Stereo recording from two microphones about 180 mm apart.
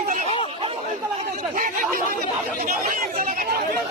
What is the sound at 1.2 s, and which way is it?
Speech, 50° right (ahead or behind).